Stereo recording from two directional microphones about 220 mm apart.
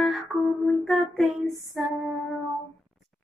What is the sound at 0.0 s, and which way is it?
Female singing, centre (ahead or behind).